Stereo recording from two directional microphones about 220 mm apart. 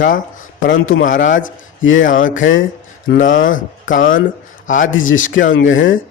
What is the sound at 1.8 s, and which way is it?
Speech, 60° left (ahead or behind).